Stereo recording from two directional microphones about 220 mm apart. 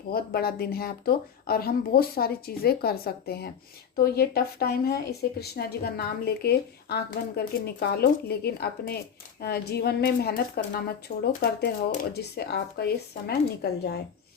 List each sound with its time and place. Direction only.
0.1 s speech: 45° left (ahead or behind)